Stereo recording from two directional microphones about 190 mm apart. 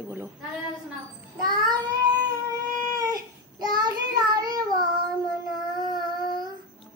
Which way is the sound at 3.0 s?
20° right (ahead or behind).